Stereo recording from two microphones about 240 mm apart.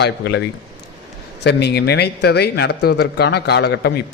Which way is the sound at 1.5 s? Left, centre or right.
Left.